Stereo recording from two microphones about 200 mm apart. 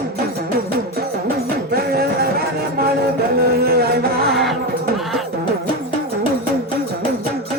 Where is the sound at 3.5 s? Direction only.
50° right (ahead or behind).